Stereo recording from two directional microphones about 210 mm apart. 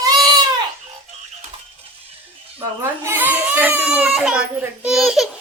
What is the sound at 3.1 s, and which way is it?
Speech, 10° right (ahead or behind).